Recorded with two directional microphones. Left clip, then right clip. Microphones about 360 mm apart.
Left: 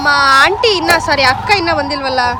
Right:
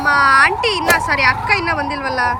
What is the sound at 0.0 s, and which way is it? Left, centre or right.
Speech, centre.